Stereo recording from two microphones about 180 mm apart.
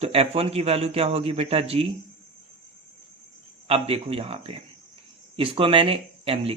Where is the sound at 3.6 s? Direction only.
35° right (ahead or behind).